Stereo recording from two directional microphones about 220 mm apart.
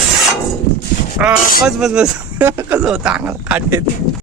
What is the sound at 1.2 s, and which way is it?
Speech, 5° right (ahead or behind).